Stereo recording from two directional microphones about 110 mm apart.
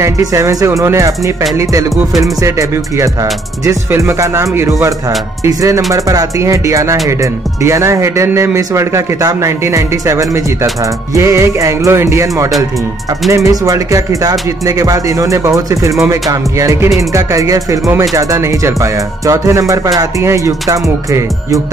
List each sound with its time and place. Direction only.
0.0 s speech: 30° right (ahead or behind)